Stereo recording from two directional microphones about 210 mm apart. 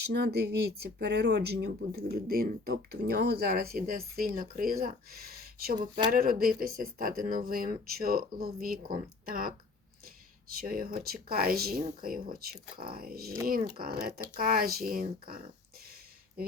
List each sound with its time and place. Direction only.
0.0 s speech: 50° right (ahead or behind)